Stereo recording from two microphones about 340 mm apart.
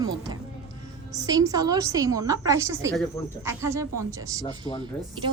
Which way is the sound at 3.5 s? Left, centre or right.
Centre.